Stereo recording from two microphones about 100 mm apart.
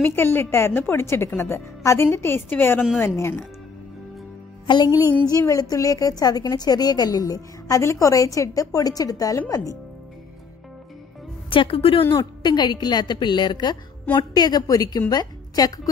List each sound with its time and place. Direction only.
0.0 s a woman's voice: 20° left (ahead or behind)
4.6 s a woman's voice: 45° left (ahead or behind)
11.5 s speech: 65° left (ahead or behind)
12.2 s a woman's voice: 45° left (ahead or behind)